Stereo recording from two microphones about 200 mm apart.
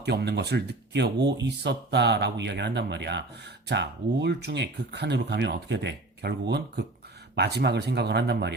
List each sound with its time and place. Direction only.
0.0 s speech: 55° right (ahead or behind)